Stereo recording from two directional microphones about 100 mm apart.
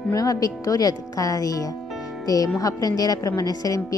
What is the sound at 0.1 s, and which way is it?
A woman's voice, 35° left (ahead or behind).